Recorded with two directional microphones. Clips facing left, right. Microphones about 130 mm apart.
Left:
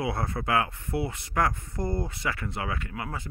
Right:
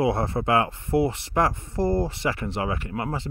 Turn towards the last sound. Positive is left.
turn(degrees=-30)  # may be behind; listen again after turning